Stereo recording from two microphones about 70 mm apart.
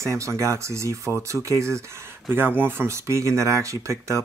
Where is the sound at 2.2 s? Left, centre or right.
Right.